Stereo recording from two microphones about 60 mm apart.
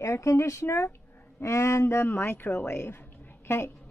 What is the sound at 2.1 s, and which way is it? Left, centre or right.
A woman's voice, left.